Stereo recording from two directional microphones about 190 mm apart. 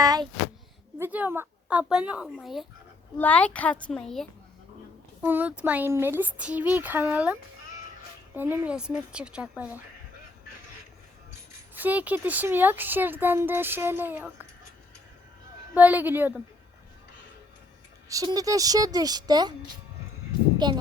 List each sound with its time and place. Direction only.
0.0 s a sound: 20° right (ahead or behind)
0.9 s a woman's voice: 10° right (ahead or behind)
5.2 s a woman's voice: 10° right (ahead or behind)
8.4 s a woman's voice: 10° right (ahead or behind)
11.7 s a woman's voice: 10° right (ahead or behind)
15.7 s a woman's voice: 10° right (ahead or behind)
18.1 s a woman's voice: 20° right (ahead or behind)
20.6 s a woman's voice: 20° right (ahead or behind)